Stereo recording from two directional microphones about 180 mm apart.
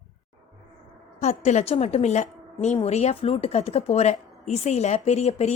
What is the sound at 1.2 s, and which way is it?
Speech, 40° left (ahead or behind).